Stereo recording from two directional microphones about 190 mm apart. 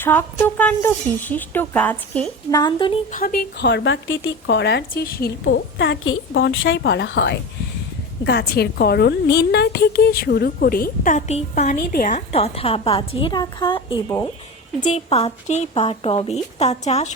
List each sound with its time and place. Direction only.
0.0 s a woman's voice: 10° left (ahead or behind)
2.5 s a woman's voice: 20° left (ahead or behind)
3.1 s speech: 45° left (ahead or behind)
12.1 s a woman's voice: 30° left (ahead or behind)
14.8 s speech: 35° left (ahead or behind)